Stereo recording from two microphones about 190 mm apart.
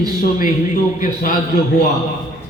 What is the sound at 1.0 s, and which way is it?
Speech, 45° left (ahead or behind).